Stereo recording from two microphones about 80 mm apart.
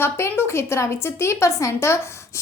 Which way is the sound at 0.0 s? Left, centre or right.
Left.